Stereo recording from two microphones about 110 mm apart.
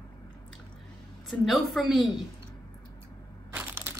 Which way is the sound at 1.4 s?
Centre (ahead or behind).